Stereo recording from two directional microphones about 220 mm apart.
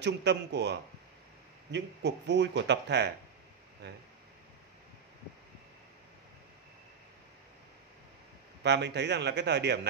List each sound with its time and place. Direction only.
0.0 s speech: 50° right (ahead or behind)
8.6 s speech: 50° right (ahead or behind)